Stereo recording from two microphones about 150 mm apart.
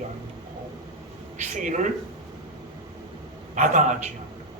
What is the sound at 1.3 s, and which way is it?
Speech, 55° right (ahead or behind).